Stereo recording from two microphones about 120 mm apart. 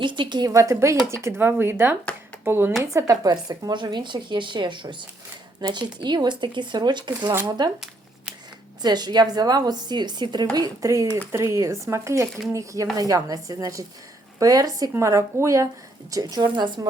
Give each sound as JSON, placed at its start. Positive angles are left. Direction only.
{"t": 0.0, "sound": "a woman's voice", "side_deg": -40}
{"t": 2.9, "sound": "a woman's voice", "side_deg": -30}
{"t": 8.8, "sound": "a woman's voice", "side_deg": -35}
{"t": 16.2, "sound": "a woman's voice", "side_deg": -35}